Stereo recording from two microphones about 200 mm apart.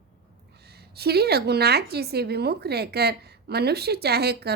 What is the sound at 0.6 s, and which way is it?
A woman's voice, 55° right (ahead or behind).